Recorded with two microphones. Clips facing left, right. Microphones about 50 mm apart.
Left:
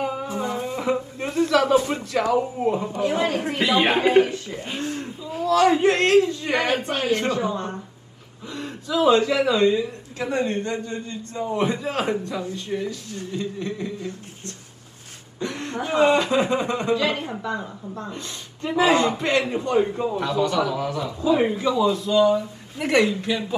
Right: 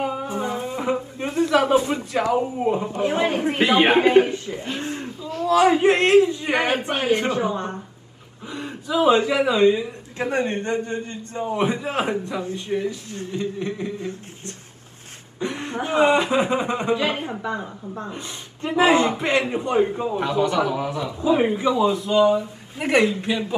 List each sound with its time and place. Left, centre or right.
0.0 s music: centre
0.3 s music: right
1.2 s a man's voice: right
4.8 s a sound: right
5.5 s a man's voice: right
10.2 s a man's voice: right; by 20.2 s centre
20.2 s a man's voice: right